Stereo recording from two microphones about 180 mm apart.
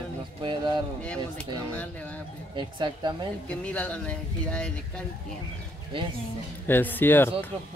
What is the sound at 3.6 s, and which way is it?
Speech, 5° left (ahead or behind).